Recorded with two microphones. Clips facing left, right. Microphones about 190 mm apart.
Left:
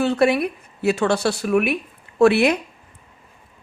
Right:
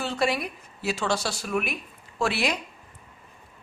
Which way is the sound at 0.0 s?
60° left (ahead or behind).